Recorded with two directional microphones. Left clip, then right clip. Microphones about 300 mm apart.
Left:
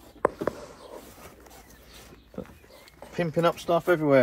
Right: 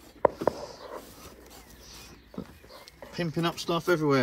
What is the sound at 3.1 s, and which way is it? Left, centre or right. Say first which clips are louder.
Speech: left 6 dB; centre.